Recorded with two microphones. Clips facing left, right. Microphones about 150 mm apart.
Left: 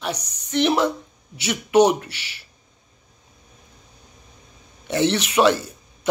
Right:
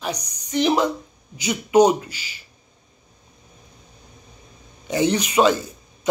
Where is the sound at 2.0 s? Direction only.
70° left (ahead or behind).